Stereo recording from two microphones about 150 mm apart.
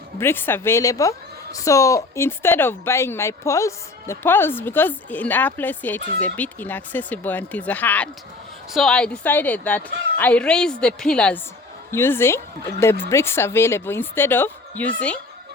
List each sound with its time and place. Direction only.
0.2 s a woman's voice: 15° left (ahead or behind)